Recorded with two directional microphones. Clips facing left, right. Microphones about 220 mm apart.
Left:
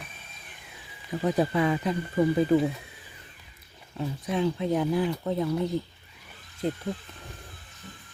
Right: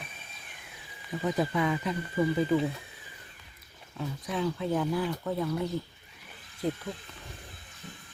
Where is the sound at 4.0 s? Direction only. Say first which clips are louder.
Left 4 dB; 25° left (ahead or behind).